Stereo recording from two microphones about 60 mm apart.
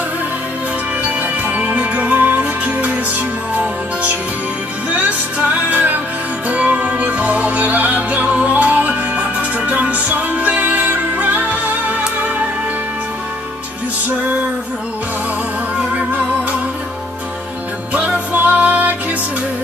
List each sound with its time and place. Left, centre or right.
1.0 s music: right
17.9 s music: right